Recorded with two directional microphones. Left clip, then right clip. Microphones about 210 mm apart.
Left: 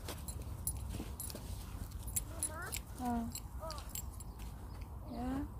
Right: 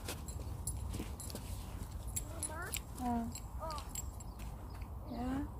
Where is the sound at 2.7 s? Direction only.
45° left (ahead or behind).